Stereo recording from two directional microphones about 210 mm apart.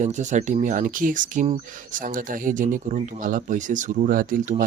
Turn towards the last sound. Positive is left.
turn(degrees=-40)  # may be behind; listen again after turning